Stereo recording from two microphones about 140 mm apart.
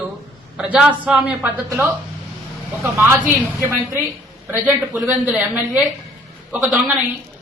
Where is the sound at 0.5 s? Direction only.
10° right (ahead or behind).